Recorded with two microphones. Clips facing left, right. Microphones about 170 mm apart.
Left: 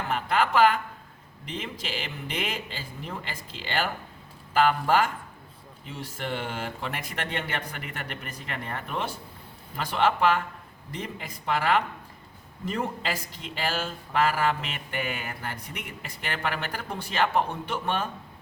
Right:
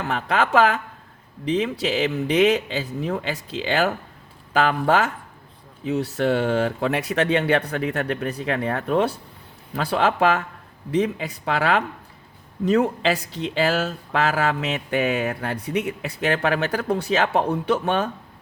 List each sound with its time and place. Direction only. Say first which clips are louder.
0.1 s speech: right 4 dB; 80° right